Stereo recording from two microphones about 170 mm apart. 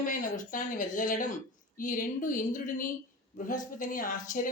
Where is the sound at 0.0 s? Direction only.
50° left (ahead or behind).